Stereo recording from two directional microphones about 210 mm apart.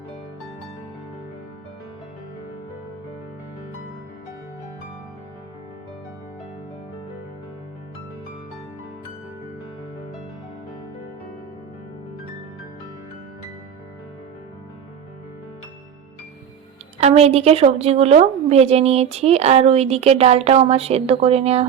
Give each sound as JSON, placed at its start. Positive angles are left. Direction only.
{"t": 17.0, "sound": "a woman's voice", "side_deg": -30}